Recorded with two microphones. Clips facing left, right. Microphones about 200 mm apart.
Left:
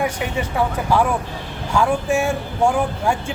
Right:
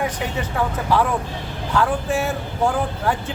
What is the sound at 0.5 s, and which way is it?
Speech, 10° left (ahead or behind).